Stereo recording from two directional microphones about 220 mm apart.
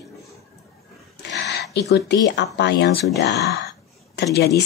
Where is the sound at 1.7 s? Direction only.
50° left (ahead or behind).